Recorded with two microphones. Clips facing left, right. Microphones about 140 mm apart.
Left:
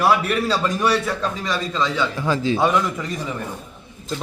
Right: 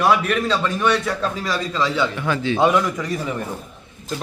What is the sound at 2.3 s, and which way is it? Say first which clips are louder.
Speech: left 1 dB; 35° left (ahead or behind).